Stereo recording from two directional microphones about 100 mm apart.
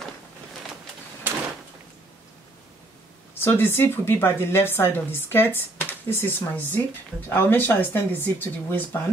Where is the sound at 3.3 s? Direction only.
20° left (ahead or behind).